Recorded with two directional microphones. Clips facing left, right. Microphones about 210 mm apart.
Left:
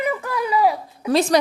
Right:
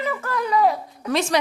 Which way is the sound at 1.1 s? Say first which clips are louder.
Left 5 dB; 35° left (ahead or behind).